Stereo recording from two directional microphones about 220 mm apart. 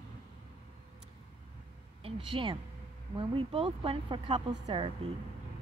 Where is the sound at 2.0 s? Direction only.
25° right (ahead or behind).